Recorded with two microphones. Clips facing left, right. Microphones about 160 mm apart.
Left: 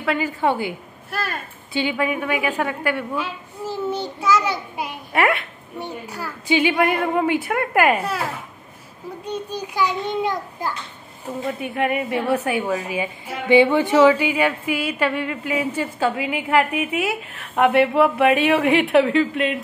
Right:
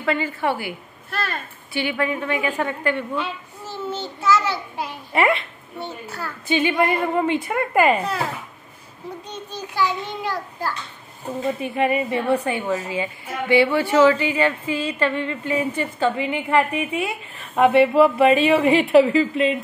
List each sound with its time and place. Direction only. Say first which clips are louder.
0.0 s a woman's voice: left 1 dB; 10° left (ahead or behind)
3.9 s child singing: right 1 dB; 10° left (ahead or behind)
5.1 s a woman's voice: even; centre (ahead or behind)
5.8 s a woman's voice: left 1 dB; 15° left (ahead or behind)
9.5 s a woman's voice: right 1 dB; 10° left (ahead or behind)
11.6 s a woman's voice: right 1 dB; centre (ahead or behind)
16.9 s speech: left 2 dB; 90° left
17.6 s a woman's voice: right 2 dB; centre (ahead or behind)